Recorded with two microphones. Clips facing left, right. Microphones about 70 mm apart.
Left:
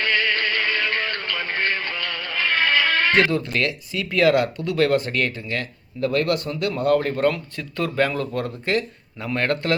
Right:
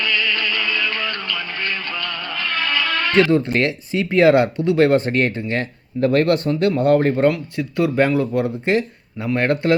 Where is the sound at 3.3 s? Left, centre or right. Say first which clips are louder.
Right 6 dB; right.